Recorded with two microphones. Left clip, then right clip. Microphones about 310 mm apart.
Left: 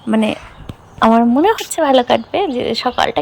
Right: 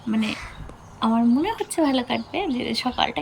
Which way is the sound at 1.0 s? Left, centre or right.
Left.